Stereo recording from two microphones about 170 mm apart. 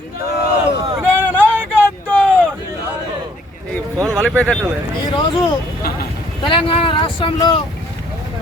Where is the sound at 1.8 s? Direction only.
5° left (ahead or behind).